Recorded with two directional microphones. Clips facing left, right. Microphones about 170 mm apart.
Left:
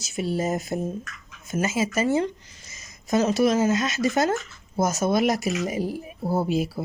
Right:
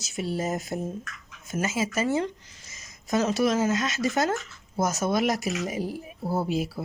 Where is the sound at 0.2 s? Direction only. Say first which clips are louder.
Left 3 dB; 20° left (ahead or behind).